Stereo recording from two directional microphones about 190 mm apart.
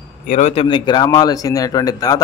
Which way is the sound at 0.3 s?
35° left (ahead or behind).